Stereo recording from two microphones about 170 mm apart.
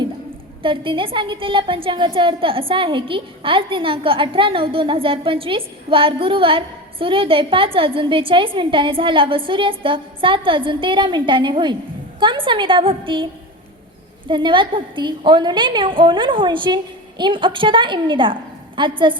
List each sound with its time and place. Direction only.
0.6 s a woman's voice: 30° right (ahead or behind)
14.3 s a woman's voice: 30° right (ahead or behind)